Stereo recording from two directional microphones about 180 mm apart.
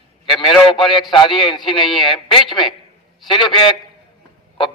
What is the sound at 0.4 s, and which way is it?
A man's voice, 25° left (ahead or behind).